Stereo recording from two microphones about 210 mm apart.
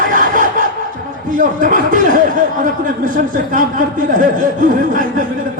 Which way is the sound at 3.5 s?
40° right (ahead or behind).